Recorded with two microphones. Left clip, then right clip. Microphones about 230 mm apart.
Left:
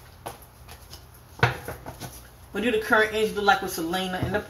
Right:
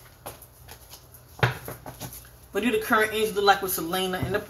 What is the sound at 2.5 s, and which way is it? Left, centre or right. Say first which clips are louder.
Speech: left 1 dB; right.